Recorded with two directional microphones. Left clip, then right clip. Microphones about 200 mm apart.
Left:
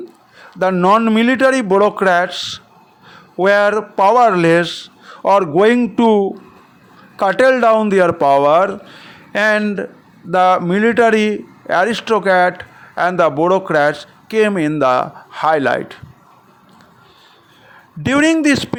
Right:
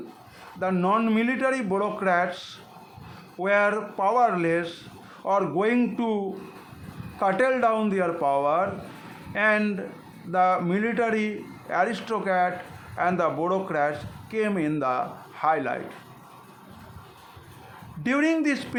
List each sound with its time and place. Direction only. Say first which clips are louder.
0.6 s a man's voice: left 12 dB; 40° left (ahead or behind)
18.0 s a man's voice: left 10 dB; 40° left (ahead or behind)